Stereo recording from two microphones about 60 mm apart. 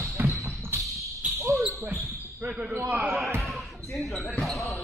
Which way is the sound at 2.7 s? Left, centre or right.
Right.